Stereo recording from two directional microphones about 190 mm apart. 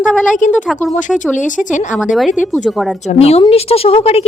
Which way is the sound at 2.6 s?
Centre (ahead or behind).